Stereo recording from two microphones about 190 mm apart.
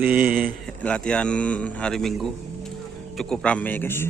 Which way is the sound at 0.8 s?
5° left (ahead or behind).